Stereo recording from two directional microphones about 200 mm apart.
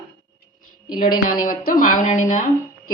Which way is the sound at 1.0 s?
45° left (ahead or behind).